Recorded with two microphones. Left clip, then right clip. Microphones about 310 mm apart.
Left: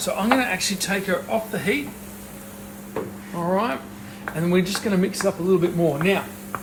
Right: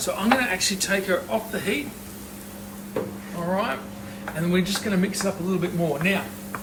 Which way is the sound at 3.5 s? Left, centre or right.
Left.